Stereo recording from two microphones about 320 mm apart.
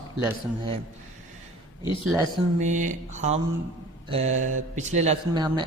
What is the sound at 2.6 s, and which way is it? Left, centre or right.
A man's voice, right.